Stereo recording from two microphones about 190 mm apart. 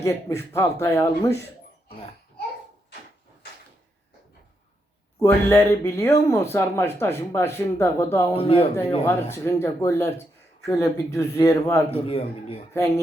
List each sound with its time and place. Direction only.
0.0 s speech: 15° left (ahead or behind)
5.2 s speech: 15° left (ahead or behind)
8.3 s a man's voice: 30° left (ahead or behind)
9.0 s speech: 15° left (ahead or behind)
11.9 s a man's voice: 30° left (ahead or behind)